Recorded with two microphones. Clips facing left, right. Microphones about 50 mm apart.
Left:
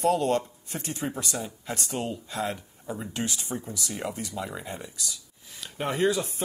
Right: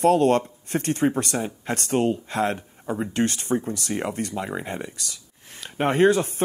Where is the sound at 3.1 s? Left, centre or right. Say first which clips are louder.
Right 10 dB; right.